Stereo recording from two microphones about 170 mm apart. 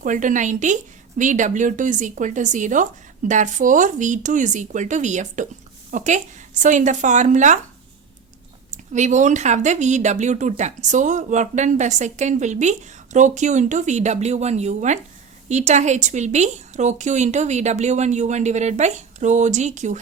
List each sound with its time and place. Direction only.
0.0 s speech: 50° right (ahead or behind)
8.7 s speech: 45° right (ahead or behind)